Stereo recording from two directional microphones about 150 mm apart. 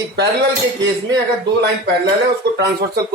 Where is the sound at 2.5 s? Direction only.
90° right.